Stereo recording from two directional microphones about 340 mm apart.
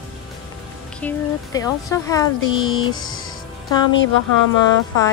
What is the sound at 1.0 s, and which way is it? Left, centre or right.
Speech, centre.